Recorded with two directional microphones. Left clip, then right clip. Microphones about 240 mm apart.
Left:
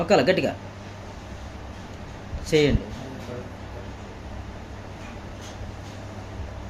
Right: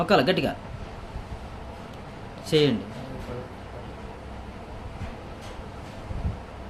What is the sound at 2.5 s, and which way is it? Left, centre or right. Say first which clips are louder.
Speech: left 1 dB; right.